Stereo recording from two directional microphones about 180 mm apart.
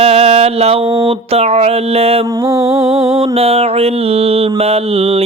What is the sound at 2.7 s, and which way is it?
Mantra, 30° right (ahead or behind).